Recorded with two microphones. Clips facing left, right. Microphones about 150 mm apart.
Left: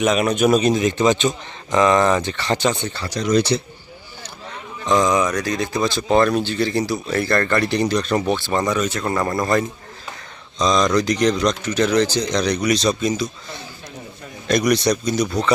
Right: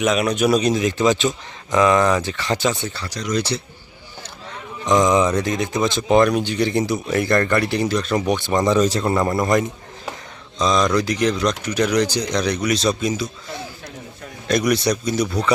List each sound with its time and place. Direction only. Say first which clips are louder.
0.0 s speech: left 1 dB; centre (ahead or behind)
3.1 s speech: left 6 dB; 25° left (ahead or behind)
4.9 s speech: right 1 dB; 20° right (ahead or behind)
10.6 s speech: left 1 dB; 5° right (ahead or behind)
14.4 s speech: left 1 dB; 5° right (ahead or behind)